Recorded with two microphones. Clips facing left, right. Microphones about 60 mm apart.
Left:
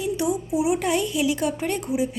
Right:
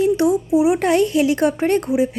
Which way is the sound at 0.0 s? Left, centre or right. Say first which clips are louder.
Right 8 dB; right.